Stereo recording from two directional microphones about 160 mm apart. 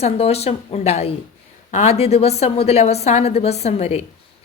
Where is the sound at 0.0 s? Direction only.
40° left (ahead or behind).